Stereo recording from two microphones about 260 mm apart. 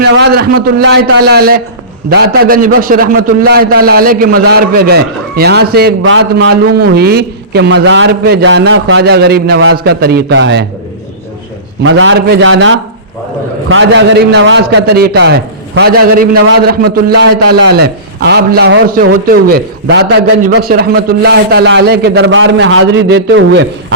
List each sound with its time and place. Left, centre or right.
0.0 s a man's voice: right
11.8 s a man's voice: right